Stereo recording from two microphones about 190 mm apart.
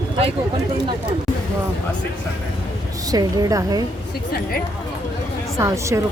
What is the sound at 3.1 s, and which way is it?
Speech, 20° right (ahead or behind).